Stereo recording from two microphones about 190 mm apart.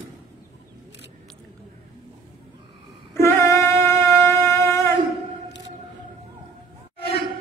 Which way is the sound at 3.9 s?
15° left (ahead or behind).